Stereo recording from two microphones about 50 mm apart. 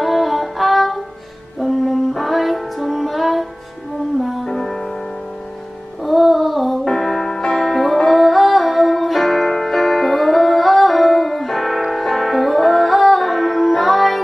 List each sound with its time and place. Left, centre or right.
0.0 s music: centre
4.5 s music: centre
6.0 s music: centre